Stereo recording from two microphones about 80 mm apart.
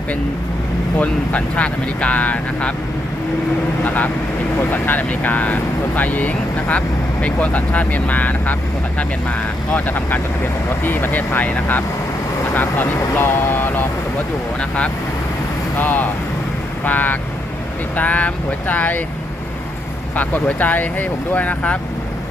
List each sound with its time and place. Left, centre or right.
0.9 s speech: centre
3.8 s speech: left
9.7 s speech: left
15.8 s speech: left
20.1 s speech: left